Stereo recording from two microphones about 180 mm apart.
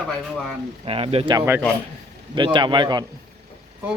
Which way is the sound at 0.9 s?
30° right (ahead or behind).